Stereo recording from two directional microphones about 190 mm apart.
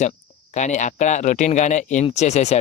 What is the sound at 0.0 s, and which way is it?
Speech, 40° left (ahead or behind).